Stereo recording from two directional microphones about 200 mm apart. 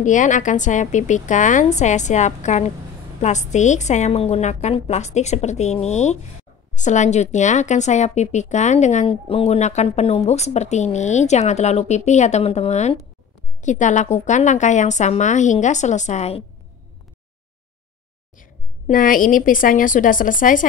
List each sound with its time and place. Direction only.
0.0 s a woman's voice: 40° left (ahead or behind)
18.4 s a woman's voice: 45° left (ahead or behind)